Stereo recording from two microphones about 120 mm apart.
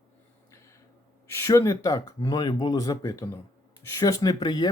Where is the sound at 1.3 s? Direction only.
25° left (ahead or behind).